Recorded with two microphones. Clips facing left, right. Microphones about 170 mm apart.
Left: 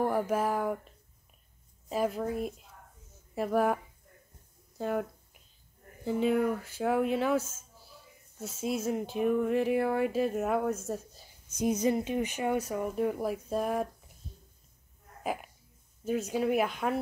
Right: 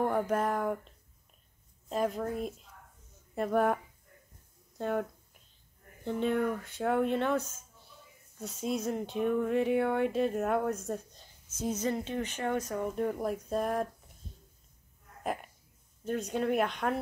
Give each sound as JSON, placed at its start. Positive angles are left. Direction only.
{"t": 0.0, "sound": "speech", "side_deg": 5}
{"t": 1.9, "sound": "speech", "side_deg": 5}
{"t": 4.7, "sound": "a sound", "side_deg": 0}
{"t": 6.0, "sound": "speech", "side_deg": 5}
{"t": 16.0, "sound": "speech", "side_deg": 5}